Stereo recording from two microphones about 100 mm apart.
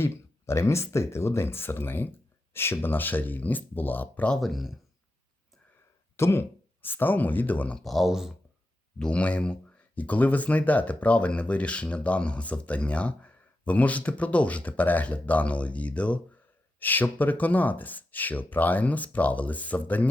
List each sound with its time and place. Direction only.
0.0 s speech: 30° left (ahead or behind)
4.4 s speech: centre (ahead or behind)
6.1 s speech: 25° left (ahead or behind)
7.8 s speech: centre (ahead or behind)
9.0 s speech: 10° left (ahead or behind)